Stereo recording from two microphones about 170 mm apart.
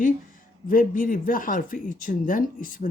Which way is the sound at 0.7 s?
55° left (ahead or behind).